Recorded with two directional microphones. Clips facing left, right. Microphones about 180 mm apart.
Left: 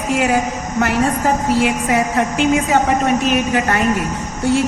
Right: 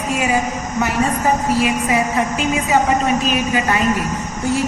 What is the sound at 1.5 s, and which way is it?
A woman's voice, 55° left (ahead or behind).